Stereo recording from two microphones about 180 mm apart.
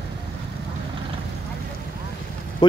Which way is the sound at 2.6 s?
25° left (ahead or behind).